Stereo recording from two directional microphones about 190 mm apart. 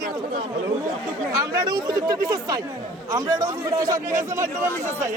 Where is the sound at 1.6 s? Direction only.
20° right (ahead or behind).